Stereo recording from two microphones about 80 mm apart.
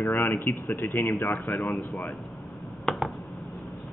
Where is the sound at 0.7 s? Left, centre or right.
Left.